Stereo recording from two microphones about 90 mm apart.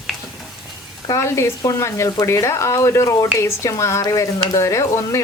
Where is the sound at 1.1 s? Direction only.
30° left (ahead or behind).